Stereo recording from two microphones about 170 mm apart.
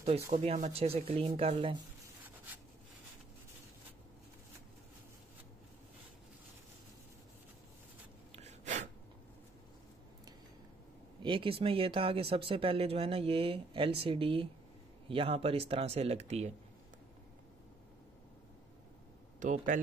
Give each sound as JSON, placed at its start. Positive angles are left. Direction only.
{"t": 0.3, "sound": "speech", "side_deg": -45}
{"t": 8.3, "sound": "gasp", "side_deg": -40}
{"t": 11.2, "sound": "speech", "side_deg": -30}
{"t": 19.4, "sound": "speech", "side_deg": -50}